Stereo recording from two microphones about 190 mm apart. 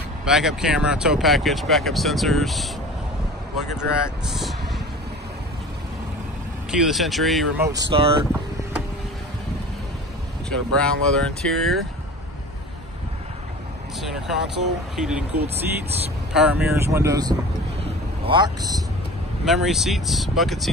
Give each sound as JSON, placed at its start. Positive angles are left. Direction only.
{"t": 0.2, "sound": "speech", "side_deg": -5}
{"t": 4.3, "sound": "speech", "side_deg": 0}
{"t": 6.7, "sound": "speech", "side_deg": 0}
{"t": 7.9, "sound": "speech", "side_deg": -30}
{"t": 10.5, "sound": "speech", "side_deg": 5}
{"t": 14.0, "sound": "speech", "side_deg": 0}
{"t": 15.4, "sound": "speech", "side_deg": -35}
{"t": 16.3, "sound": "speech", "side_deg": -10}
{"t": 19.4, "sound": "speech", "side_deg": 0}